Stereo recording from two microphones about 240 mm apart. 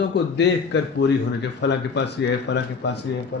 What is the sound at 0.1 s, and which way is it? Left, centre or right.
A man's voice, left.